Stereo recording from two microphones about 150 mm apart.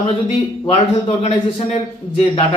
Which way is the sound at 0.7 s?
45° left (ahead or behind).